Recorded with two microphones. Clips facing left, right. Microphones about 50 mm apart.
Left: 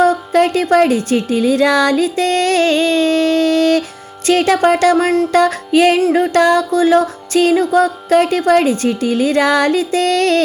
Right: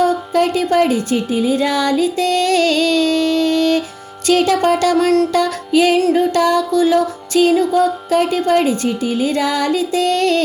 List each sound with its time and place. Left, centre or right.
0.0 s speech: left
4.3 s music: left